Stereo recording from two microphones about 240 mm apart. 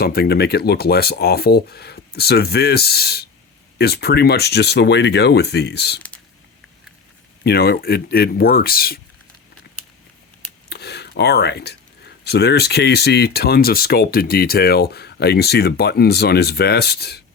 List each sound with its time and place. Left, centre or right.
0.0 s speech: left
7.4 s speech: left
10.7 s speech: left